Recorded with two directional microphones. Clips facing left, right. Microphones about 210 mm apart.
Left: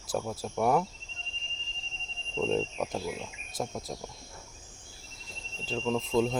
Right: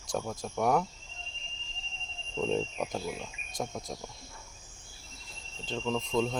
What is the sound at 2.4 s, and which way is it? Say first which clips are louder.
Speech: left 1 dB; centre (ahead or behind).